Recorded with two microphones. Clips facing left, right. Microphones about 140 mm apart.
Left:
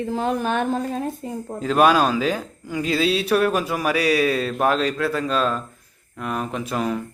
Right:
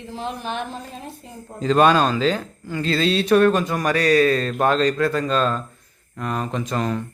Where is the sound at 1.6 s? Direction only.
5° left (ahead or behind).